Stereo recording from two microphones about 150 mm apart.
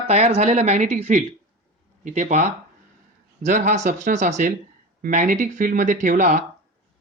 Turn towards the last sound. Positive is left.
turn(degrees=-55)  # may be behind; listen again after turning